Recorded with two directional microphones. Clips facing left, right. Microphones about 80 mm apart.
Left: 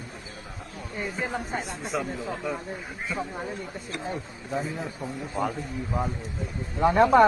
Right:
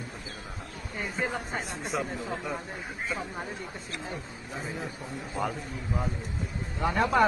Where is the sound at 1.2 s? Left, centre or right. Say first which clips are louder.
Left 1 dB; centre.